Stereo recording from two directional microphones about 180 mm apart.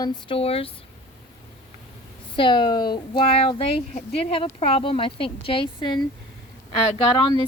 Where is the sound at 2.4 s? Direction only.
25° left (ahead or behind).